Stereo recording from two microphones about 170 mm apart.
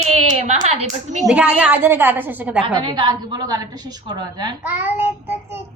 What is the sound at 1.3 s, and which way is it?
A woman's voice, 5° right (ahead or behind).